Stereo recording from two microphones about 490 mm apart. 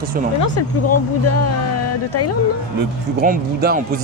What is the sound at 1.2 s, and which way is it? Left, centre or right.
Speech, left.